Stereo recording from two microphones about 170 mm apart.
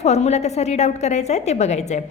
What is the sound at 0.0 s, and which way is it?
A woman's voice, 40° left (ahead or behind).